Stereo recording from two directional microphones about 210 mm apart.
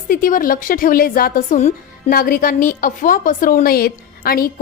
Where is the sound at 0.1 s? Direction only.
40° left (ahead or behind).